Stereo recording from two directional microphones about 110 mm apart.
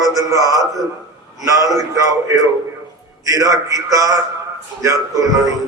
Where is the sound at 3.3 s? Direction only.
30° right (ahead or behind).